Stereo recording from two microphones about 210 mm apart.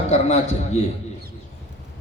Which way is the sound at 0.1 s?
30° left (ahead or behind).